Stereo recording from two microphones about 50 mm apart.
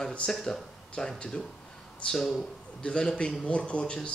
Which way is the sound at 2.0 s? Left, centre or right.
Left.